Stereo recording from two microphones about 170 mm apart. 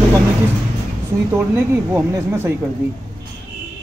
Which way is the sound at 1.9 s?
20° right (ahead or behind).